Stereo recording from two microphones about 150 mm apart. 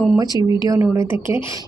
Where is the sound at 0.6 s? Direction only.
20° right (ahead or behind).